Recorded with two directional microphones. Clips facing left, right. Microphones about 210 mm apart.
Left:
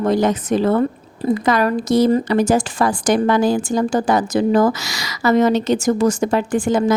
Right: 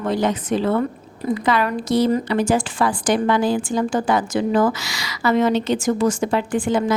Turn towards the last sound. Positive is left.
turn(degrees=45)  # may be behind; listen again after turning